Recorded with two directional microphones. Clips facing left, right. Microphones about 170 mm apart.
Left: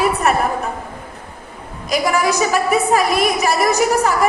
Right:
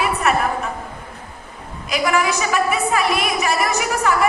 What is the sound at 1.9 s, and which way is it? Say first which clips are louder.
A woman's voice: left 2 dB; 40° left (ahead or behind).